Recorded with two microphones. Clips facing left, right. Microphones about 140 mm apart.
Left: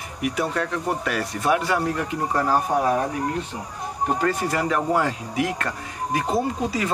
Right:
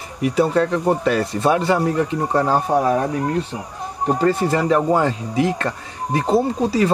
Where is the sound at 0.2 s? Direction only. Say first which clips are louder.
Right 8 dB; 30° right (ahead or behind).